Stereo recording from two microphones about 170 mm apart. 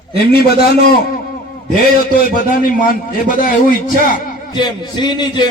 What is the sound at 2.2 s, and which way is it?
A man's voice, 55° left (ahead or behind).